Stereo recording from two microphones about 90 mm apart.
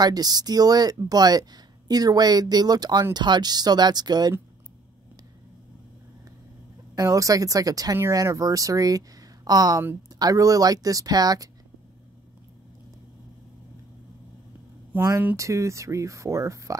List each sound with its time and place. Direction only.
0.0 s speech: 45° right (ahead or behind)
7.0 s speech: 40° right (ahead or behind)
14.9 s speech: 20° right (ahead or behind)
15.3 s speech: 35° right (ahead or behind)